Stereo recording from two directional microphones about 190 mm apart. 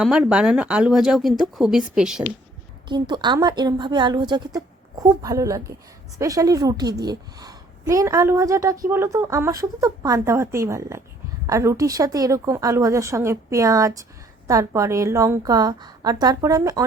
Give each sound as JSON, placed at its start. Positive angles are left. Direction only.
{"t": 0.0, "sound": "speech", "side_deg": -5}
{"t": 2.9, "sound": "a woman's voice", "side_deg": -25}